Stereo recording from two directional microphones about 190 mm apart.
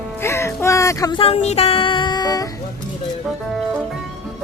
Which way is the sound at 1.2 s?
35° left (ahead or behind).